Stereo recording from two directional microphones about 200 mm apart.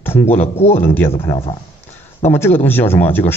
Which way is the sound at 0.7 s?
10° left (ahead or behind).